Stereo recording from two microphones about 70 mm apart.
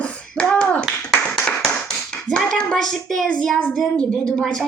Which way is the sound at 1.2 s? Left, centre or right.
Centre.